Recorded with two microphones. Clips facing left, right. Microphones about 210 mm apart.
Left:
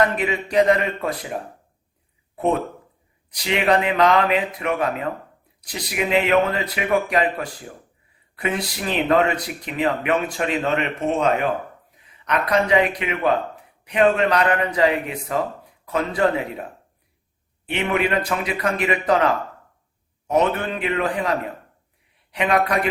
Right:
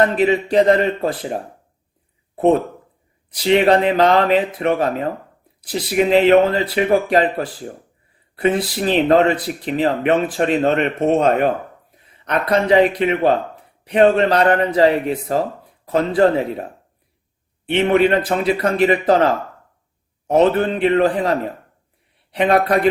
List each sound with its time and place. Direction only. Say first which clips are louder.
0.0 s a man's voice: right 6 dB; 35° right (ahead or behind)
12.2 s speech: right 3 dB; 35° right (ahead or behind)
17.7 s speech: right 7 dB; 40° right (ahead or behind)
20.3 s a man's voice: right 6 dB; 35° right (ahead or behind)